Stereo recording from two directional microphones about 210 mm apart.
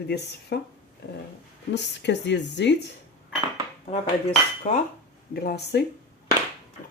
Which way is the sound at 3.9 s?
35° left (ahead or behind).